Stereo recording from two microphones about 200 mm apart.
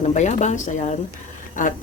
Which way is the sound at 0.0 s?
35° left (ahead or behind).